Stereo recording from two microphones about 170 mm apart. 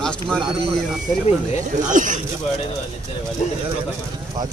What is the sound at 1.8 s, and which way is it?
Speech, 50° right (ahead or behind).